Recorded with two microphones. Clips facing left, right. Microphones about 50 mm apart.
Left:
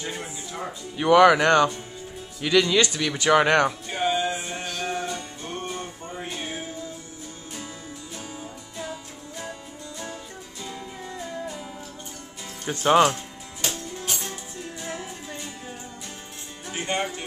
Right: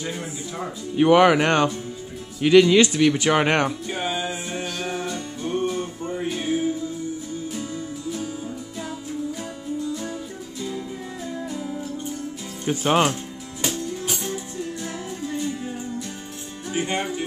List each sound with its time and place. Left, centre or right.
0.9 s a man's voice: centre
3.6 s music: centre
9.4 s music: centre
11.2 s music: centre
12.6 s a man's voice: centre
14.0 s music: centre
16.7 s speech: centre